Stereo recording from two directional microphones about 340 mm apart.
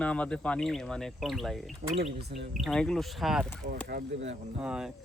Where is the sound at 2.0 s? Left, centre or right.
Right.